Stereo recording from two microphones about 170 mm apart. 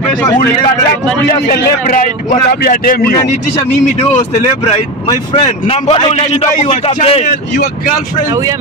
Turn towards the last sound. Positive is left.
turn(degrees=35)  # may be behind; listen again after turning